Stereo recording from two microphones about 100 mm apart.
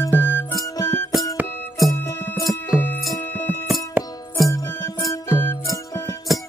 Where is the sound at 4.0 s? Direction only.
20° right (ahead or behind).